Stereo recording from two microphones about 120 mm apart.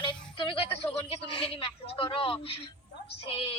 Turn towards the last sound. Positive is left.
turn(degrees=50)  # may be behind; listen again after turning